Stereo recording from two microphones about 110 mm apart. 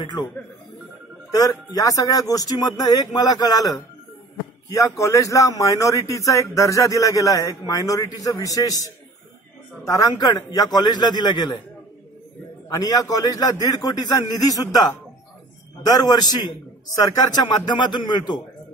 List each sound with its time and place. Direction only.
0.0 s speech: 40° left (ahead or behind)
1.3 s a man's voice: 35° left (ahead or behind)
9.8 s speech: 35° left (ahead or behind)
12.6 s speech: 35° left (ahead or behind)
17.4 s speech: 40° left (ahead or behind)